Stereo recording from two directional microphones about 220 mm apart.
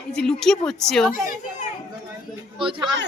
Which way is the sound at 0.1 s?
5° left (ahead or behind).